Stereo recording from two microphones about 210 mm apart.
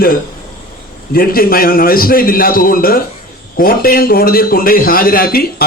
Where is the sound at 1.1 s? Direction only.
45° left (ahead or behind).